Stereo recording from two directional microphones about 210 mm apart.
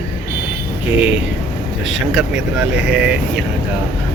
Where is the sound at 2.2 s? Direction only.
5° right (ahead or behind).